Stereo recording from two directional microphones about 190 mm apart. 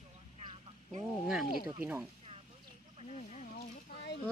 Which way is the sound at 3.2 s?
40° left (ahead or behind).